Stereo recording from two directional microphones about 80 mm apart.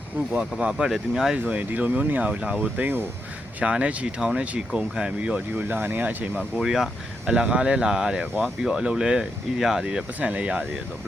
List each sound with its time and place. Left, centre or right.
0.6 s speech: centre
2.8 s speech: right
3.6 s speech: centre
6.6 s speech: centre